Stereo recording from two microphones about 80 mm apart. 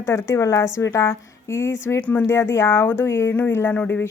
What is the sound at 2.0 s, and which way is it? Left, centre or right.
Speech, centre.